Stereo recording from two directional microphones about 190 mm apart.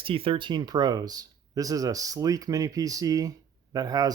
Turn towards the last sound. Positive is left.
turn(degrees=-20)  # may be behind; listen again after turning